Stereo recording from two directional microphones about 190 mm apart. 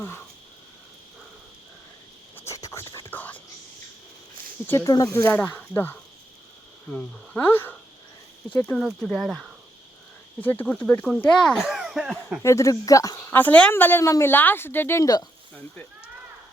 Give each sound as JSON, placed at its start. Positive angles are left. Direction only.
{"t": 2.3, "sound": "whispering", "side_deg": 15}
{"t": 4.6, "sound": "a woman's voice", "side_deg": 15}
{"t": 10.4, "sound": "speech", "side_deg": 10}
{"t": 12.4, "sound": "a woman's voice", "side_deg": 15}
{"t": 15.5, "sound": "a woman's voice", "side_deg": 10}